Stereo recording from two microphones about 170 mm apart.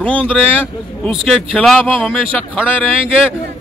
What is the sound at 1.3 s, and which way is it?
Speech, centre (ahead or behind).